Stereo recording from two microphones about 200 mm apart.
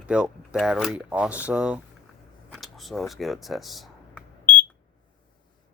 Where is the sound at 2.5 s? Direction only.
Centre (ahead or behind).